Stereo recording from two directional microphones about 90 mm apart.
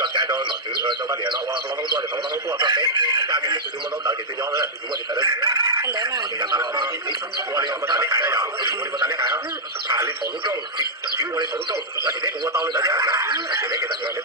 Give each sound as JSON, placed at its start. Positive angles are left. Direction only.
{"t": 0.0, "sound": "radio", "side_deg": -55}
{"t": 1.2, "sound": "speech", "side_deg": -60}
{"t": 10.5, "sound": "speech", "side_deg": -45}